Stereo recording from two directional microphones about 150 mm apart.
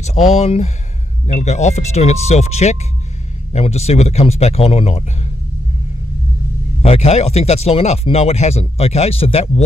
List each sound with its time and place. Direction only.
0.0 s a sound: 50° left (ahead or behind)
0.4 s speech: 45° left (ahead or behind)
6.8 s speech: 45° left (ahead or behind)